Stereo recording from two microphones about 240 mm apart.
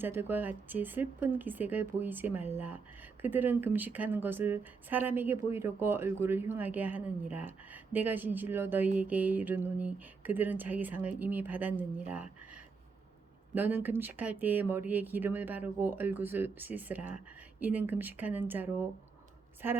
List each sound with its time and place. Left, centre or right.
0.0 s speech: centre
13.5 s speech: centre